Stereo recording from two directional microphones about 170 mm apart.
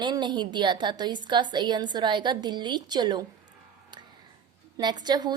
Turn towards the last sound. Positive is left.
turn(degrees=-25)  # may be behind; listen again after turning